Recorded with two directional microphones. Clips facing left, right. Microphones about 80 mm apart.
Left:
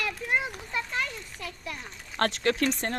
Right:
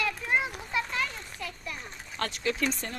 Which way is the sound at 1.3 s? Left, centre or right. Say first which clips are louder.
Even; left.